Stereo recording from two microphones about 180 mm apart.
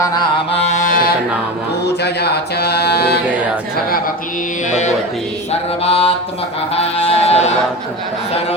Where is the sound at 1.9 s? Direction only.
65° left (ahead or behind).